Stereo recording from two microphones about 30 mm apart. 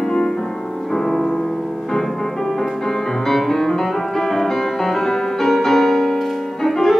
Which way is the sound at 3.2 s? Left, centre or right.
Centre.